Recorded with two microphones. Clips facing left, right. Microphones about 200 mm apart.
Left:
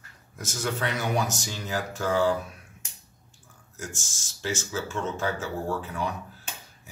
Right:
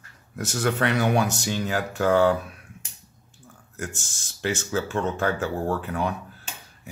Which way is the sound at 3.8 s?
60° right (ahead or behind).